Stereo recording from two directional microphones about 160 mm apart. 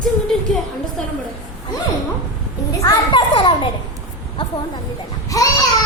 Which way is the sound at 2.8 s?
30° left (ahead or behind).